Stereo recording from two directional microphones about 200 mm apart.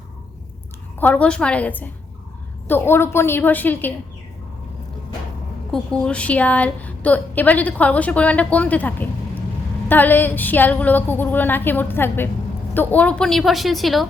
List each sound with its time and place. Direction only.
0.9 s a woman's voice: 5° left (ahead or behind)
5.7 s a woman's voice: 5° left (ahead or behind)